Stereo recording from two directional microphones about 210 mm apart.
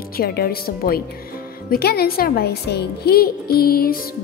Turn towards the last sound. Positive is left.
turn(degrees=45)  # may be behind; listen again after turning